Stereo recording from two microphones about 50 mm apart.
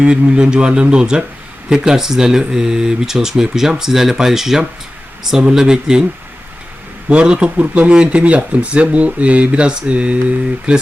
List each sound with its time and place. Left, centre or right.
0.0 s speech: centre
7.1 s speech: right